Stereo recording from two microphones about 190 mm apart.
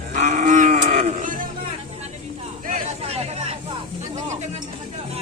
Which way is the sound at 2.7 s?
35° right (ahead or behind).